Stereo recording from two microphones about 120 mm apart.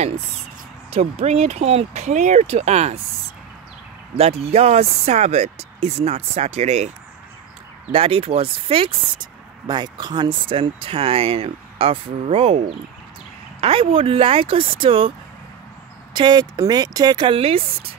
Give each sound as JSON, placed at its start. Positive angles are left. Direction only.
{"t": 0.8, "sound": "speech", "side_deg": -60}
{"t": 4.2, "sound": "speech", "side_deg": -60}
{"t": 7.9, "sound": "speech", "side_deg": -50}
{"t": 16.1, "sound": "speech", "side_deg": -40}